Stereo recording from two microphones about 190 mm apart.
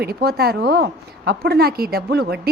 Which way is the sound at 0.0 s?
55° right (ahead or behind).